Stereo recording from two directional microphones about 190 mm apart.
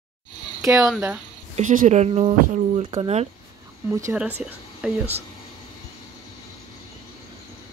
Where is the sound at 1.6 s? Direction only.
40° right (ahead or behind).